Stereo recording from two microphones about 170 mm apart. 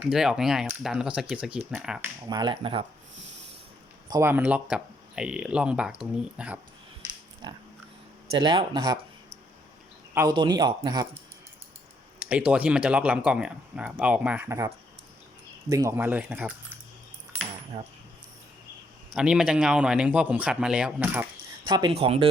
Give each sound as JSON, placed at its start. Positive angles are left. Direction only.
{"t": 0.0, "sound": "a man's voice", "side_deg": -5}
{"t": 2.2, "sound": "speech", "side_deg": -25}
{"t": 4.1, "sound": "speech", "side_deg": -15}
{"t": 7.4, "sound": "speech", "side_deg": -30}
{"t": 10.2, "sound": "speech", "side_deg": -25}
{"t": 12.2, "sound": "speech", "side_deg": -5}
{"t": 15.7, "sound": "speech", "side_deg": -20}
{"t": 19.1, "sound": "a man's voice", "side_deg": -5}
{"t": 21.7, "sound": "speech", "side_deg": -25}